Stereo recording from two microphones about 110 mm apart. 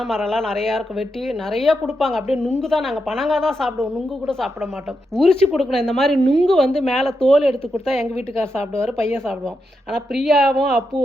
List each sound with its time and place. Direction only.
0.0 s speech: 5° left (ahead or behind)
9.0 s speech: 5° left (ahead or behind)